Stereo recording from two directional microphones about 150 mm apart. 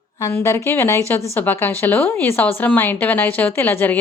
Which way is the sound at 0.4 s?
15° left (ahead or behind).